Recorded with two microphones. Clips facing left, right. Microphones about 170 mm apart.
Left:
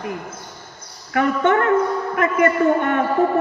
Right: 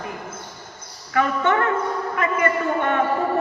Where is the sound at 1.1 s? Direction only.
50° left (ahead or behind).